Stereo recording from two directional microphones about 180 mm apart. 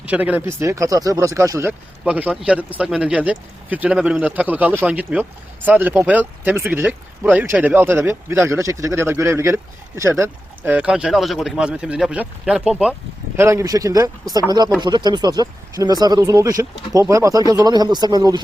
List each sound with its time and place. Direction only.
0.0 s speech: 5° right (ahead or behind)